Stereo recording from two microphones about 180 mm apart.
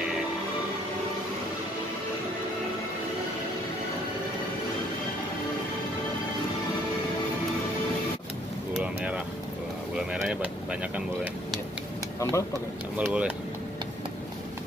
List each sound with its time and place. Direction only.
8.7 s vehicle: 5° right (ahead or behind)
9.9 s a sound: 5° right (ahead or behind)
12.2 s speech: 15° left (ahead or behind)
12.9 s speech: 5° right (ahead or behind)